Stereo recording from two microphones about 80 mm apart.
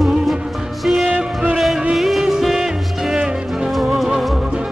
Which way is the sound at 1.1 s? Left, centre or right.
Centre.